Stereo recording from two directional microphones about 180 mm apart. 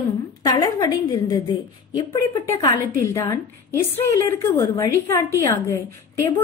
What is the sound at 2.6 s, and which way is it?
A woman's voice, 20° left (ahead or behind).